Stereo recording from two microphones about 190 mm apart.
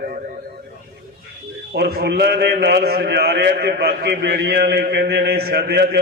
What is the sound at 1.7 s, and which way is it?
A man's voice, 60° right (ahead or behind).